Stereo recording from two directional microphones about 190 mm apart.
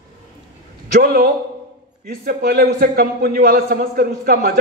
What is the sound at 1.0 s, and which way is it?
A man's voice, 50° right (ahead or behind).